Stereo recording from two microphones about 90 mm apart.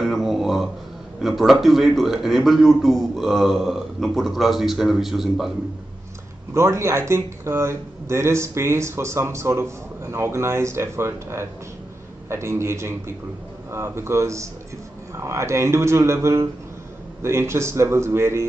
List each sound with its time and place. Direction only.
0.0 s a man's voice: centre (ahead or behind)
6.5 s speech: 30° right (ahead or behind)